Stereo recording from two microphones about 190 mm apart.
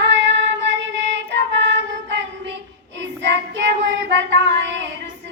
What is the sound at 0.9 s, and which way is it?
Child singing, 70° right (ahead or behind).